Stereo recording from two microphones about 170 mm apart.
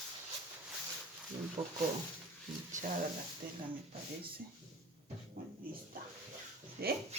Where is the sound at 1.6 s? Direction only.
35° right (ahead or behind).